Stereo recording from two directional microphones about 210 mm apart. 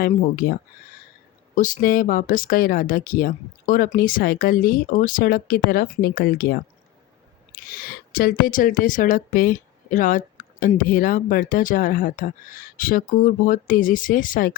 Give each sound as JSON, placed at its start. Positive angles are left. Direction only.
{"t": 0.4, "sound": "speech", "side_deg": 40}